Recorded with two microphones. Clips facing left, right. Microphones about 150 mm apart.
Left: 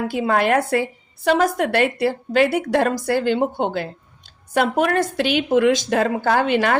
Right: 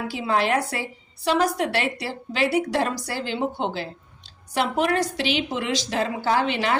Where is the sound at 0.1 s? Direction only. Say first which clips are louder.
Left 3 dB; 50° left (ahead or behind).